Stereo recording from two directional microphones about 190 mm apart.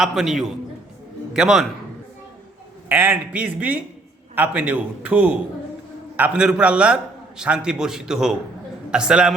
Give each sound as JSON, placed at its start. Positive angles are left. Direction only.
{"t": 0.0, "sound": "a man's voice", "side_deg": 0}
{"t": 2.9, "sound": "a man's voice", "side_deg": -10}